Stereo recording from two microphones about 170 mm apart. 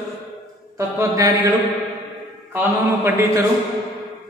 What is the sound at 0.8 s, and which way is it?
Speech, 20° right (ahead or behind).